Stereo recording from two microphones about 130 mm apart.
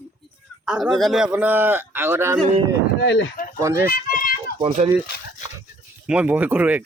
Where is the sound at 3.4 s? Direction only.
90° left.